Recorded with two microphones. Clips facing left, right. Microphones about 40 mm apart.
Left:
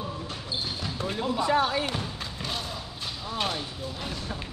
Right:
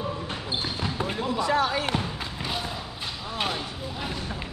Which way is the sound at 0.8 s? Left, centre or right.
Right.